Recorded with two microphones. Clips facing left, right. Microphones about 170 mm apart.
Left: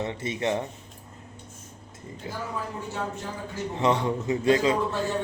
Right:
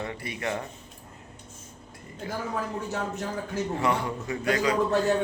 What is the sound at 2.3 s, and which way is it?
Speech, 20° left (ahead or behind).